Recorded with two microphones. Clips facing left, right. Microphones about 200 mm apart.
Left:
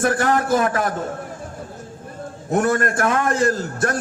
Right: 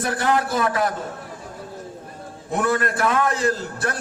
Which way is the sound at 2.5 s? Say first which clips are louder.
Left 3 dB; 50° left (ahead or behind).